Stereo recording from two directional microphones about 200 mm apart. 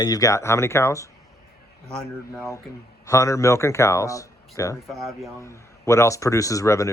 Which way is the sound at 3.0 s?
15° left (ahead or behind).